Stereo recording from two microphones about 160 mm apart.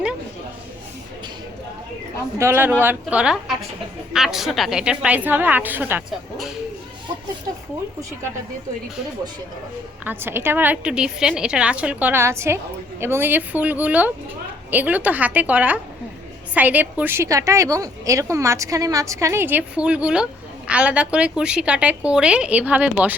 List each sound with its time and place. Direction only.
2.4 s a woman's voice: 15° right (ahead or behind)
10.0 s a woman's voice: 10° right (ahead or behind)